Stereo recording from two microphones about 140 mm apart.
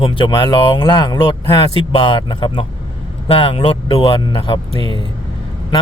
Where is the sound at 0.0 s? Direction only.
35° left (ahead or behind).